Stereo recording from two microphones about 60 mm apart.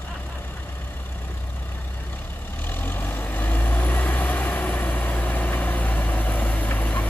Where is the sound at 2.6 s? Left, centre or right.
Left.